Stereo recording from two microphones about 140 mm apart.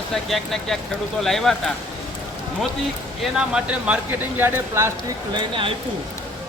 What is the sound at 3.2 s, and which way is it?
Speech, 5° right (ahead or behind).